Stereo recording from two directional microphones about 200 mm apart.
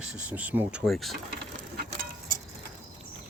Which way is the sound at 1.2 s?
55° right (ahead or behind).